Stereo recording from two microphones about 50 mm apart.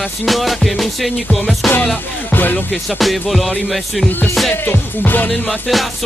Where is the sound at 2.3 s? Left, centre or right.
Left.